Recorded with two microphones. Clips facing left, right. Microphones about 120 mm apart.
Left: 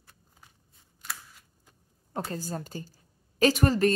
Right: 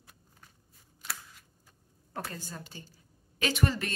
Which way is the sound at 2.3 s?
40° left (ahead or behind).